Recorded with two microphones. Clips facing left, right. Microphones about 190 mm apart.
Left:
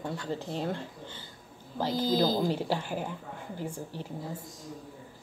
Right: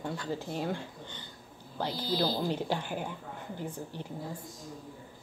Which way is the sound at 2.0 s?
45° left (ahead or behind).